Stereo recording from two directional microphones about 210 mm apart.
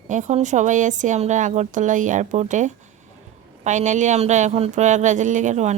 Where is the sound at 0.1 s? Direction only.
35° right (ahead or behind).